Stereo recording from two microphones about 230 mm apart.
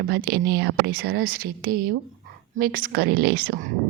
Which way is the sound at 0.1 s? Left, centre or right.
Right.